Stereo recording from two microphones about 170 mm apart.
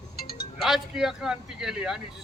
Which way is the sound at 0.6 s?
Centre (ahead or behind).